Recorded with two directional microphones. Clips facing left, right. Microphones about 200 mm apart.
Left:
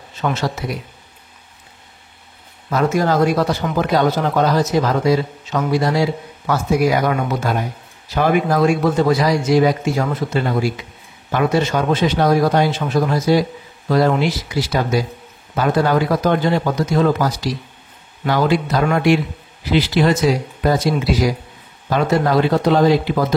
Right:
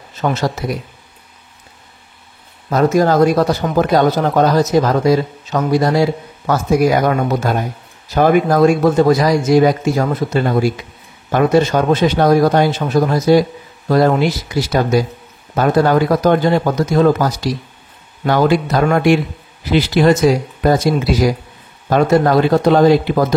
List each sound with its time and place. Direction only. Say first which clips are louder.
0.1 s speech: right 3 dB; 40° right (ahead or behind)
2.7 s speech: right 4 dB; 40° right (ahead or behind)